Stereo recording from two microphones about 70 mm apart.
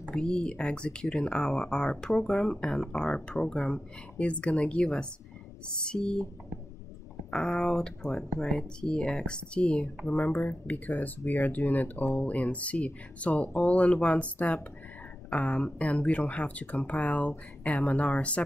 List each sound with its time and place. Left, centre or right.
0.1 s speech: centre
7.2 s speech: centre
10.1 s speech: left